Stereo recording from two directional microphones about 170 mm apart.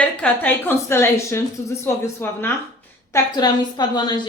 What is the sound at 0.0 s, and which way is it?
A woman's voice, 10° left (ahead or behind).